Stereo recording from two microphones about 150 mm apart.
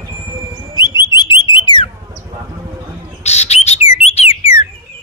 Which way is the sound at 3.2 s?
45° left (ahead or behind).